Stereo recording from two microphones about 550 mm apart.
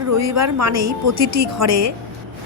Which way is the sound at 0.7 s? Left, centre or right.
Right.